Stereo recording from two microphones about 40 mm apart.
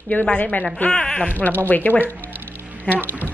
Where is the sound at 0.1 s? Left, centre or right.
Left.